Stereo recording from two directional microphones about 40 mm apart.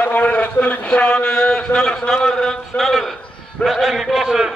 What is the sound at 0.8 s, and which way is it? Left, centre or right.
A man's voice, left.